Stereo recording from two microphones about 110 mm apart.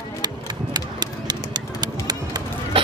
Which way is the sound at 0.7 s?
40° right (ahead or behind).